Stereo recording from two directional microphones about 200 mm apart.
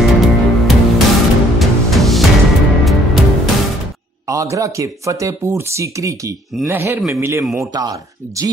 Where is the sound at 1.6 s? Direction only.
Centre (ahead or behind).